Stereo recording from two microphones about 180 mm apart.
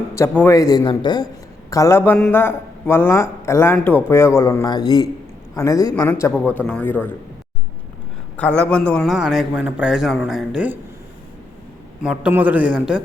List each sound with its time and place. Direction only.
0.1 s a man's voice: 15° left (ahead or behind)
8.4 s a man's voice: 10° left (ahead or behind)
12.0 s a man's voice: 10° right (ahead or behind)